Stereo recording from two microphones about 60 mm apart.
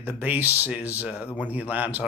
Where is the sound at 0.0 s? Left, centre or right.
Right.